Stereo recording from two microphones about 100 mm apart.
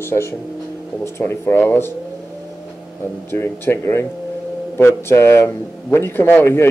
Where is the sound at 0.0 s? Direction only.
25° left (ahead or behind).